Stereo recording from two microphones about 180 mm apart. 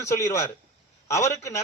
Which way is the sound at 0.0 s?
15° left (ahead or behind).